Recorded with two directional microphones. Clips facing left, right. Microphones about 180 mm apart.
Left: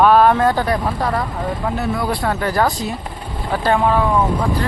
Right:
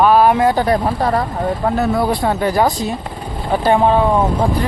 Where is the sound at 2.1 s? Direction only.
20° right (ahead or behind).